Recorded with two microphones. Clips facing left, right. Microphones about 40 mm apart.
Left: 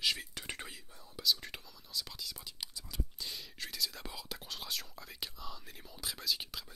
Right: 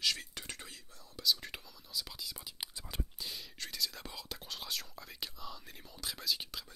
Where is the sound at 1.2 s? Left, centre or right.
Centre.